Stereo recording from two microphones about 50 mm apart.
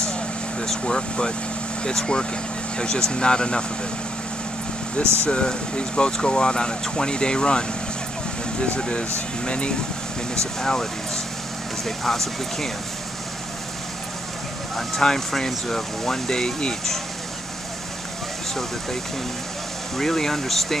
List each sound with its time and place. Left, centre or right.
0.0 s air conditioning: centre
1.8 s speech: centre
5.2 s speech: centre
14.8 s speech: centre
18.5 s speech: centre
20.0 s speech: centre